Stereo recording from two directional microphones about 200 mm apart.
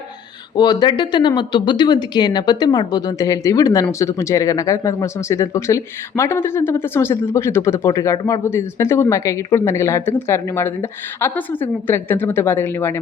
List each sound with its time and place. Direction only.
0.5 s speech: 20° left (ahead or behind)